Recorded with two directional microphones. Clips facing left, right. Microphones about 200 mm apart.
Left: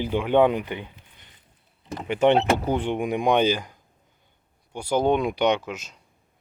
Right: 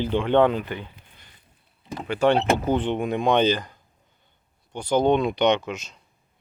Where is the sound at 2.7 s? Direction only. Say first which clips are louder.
Right 1 dB; 10° left (ahead or behind).